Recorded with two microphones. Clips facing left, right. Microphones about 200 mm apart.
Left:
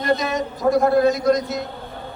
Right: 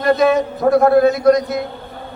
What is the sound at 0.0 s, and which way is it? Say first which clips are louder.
A man's voice: right 7 dB; 60° right (ahead or behind).